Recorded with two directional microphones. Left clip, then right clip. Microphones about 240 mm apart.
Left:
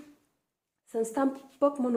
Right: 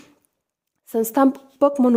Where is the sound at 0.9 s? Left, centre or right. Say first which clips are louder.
Right 11 dB; right.